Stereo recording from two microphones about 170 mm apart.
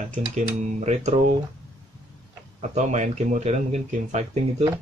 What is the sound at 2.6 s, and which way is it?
Speech, 45° right (ahead or behind).